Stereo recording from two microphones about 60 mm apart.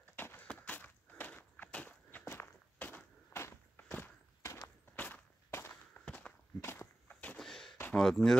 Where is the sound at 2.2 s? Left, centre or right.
Left.